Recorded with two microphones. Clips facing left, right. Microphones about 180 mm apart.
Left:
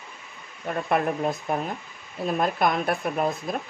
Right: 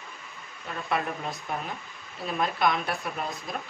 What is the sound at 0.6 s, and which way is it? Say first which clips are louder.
Speech: left 6 dB; 50° left (ahead or behind).